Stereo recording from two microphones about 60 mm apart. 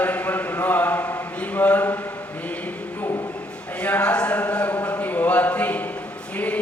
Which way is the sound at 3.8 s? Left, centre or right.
Left.